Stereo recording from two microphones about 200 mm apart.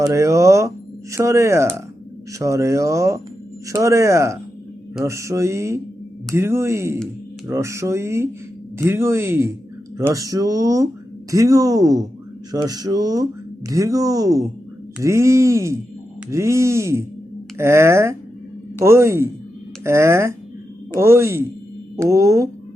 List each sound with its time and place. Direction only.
0.0 s speech: 15° right (ahead or behind)